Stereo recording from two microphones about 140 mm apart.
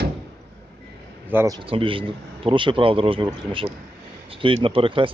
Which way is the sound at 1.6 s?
40° right (ahead or behind).